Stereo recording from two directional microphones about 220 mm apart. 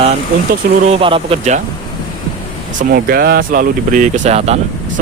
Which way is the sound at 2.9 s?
45° right (ahead or behind).